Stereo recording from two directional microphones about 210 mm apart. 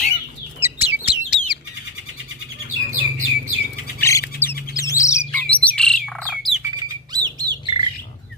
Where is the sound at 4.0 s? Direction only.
15° left (ahead or behind).